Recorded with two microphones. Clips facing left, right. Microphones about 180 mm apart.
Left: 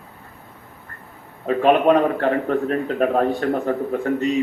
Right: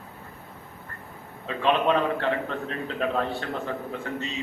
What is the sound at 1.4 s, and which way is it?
A man's voice, 50° left (ahead or behind).